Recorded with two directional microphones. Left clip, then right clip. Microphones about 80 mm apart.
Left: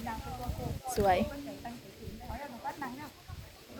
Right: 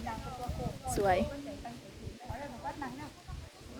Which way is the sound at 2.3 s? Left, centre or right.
Centre.